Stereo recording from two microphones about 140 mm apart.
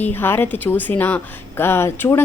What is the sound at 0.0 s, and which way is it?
Speech, 15° left (ahead or behind).